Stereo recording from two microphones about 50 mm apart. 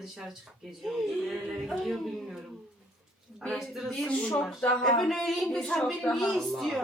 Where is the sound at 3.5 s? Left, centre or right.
Centre.